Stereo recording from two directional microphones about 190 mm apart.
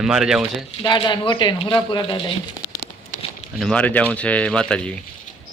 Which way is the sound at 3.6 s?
5° left (ahead or behind).